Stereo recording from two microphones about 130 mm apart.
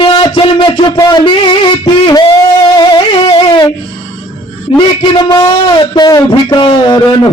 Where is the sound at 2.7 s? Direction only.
35° left (ahead or behind).